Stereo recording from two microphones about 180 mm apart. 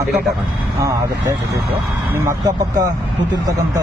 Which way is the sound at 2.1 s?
15° right (ahead or behind).